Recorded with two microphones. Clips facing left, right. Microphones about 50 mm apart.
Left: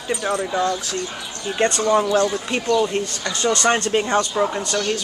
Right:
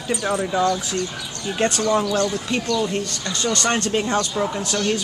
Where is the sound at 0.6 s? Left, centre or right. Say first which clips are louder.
Right 2 dB; left.